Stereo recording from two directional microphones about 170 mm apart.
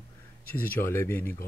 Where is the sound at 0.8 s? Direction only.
15° left (ahead or behind).